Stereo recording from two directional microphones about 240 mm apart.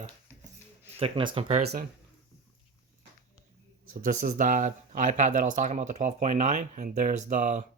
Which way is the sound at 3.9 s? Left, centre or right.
Right.